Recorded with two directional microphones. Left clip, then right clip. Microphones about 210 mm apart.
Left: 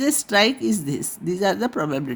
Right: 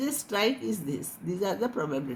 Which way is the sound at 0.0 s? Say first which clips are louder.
Left 9 dB; 55° left (ahead or behind).